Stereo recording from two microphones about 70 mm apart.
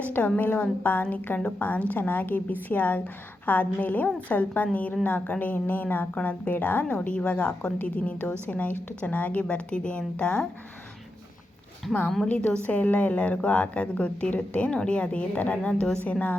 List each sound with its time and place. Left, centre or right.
0.0 s a woman's voice: left
12.2 s a woman's voice: centre